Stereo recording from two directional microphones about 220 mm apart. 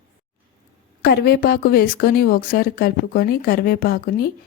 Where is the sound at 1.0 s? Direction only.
45° left (ahead or behind).